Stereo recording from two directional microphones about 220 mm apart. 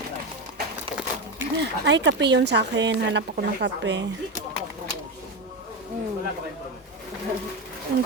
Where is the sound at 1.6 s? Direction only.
55° right (ahead or behind).